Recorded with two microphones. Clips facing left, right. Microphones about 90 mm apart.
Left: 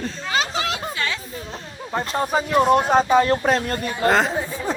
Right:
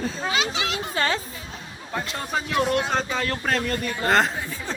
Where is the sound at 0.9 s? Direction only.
40° right (ahead or behind).